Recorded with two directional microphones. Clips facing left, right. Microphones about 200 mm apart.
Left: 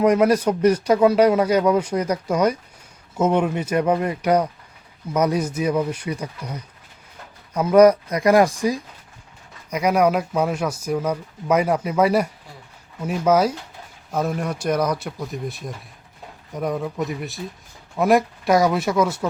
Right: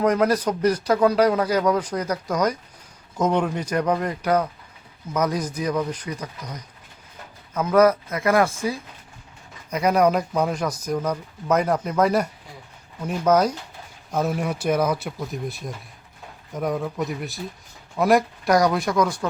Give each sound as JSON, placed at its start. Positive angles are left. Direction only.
{"t": 0.0, "sound": "speech", "side_deg": 10}